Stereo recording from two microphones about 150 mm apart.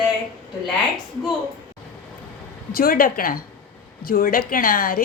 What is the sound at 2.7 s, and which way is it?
A woman's voice, 75° left (ahead or behind).